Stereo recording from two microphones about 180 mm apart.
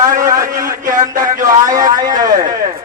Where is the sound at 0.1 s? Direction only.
50° right (ahead or behind).